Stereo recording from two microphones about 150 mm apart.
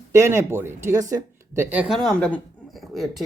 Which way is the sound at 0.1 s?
15° right (ahead or behind).